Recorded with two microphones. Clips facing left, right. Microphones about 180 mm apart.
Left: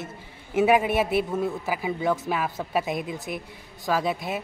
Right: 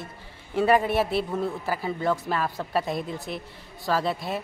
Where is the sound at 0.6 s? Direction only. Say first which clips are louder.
Left 1 dB; 5° left (ahead or behind).